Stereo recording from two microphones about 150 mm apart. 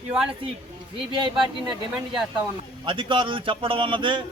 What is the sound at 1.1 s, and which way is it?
Speech, 30° right (ahead or behind).